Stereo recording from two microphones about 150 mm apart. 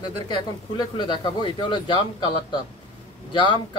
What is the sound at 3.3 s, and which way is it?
Speech, 30° left (ahead or behind).